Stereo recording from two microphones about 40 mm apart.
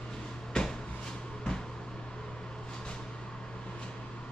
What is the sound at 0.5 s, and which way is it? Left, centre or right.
Cupboard open or close, centre.